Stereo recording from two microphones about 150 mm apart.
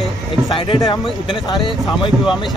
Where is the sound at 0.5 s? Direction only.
35° left (ahead or behind).